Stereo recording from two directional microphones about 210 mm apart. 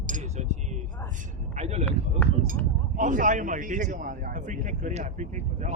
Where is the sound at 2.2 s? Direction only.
5° left (ahead or behind).